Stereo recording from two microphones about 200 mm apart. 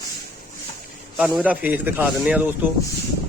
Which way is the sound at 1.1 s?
5° right (ahead or behind).